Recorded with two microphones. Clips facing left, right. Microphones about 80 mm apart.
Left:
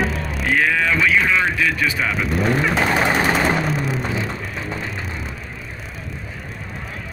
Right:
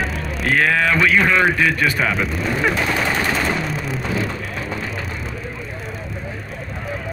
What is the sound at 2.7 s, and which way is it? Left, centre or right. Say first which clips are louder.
Speech: left 2 dB; left.